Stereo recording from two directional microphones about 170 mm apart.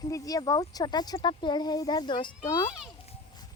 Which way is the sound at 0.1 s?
20° left (ahead or behind).